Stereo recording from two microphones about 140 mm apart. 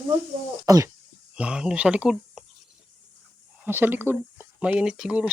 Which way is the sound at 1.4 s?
5° right (ahead or behind).